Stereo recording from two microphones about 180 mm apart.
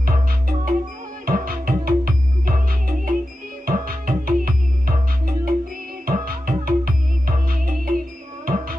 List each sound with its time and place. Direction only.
0.0 s music: 55° right (ahead or behind)